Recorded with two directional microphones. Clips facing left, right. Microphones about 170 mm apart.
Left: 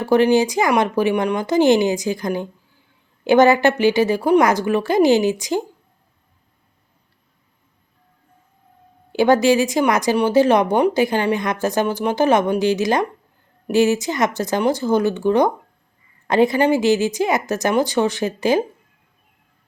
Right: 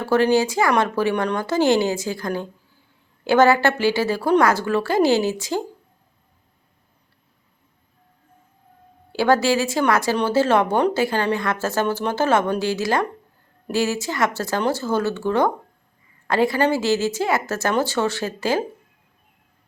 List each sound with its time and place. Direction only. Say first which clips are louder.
0.0 s speech: left 3 dB; 15° left (ahead or behind)
9.1 s speech: left 4 dB; 20° left (ahead or behind)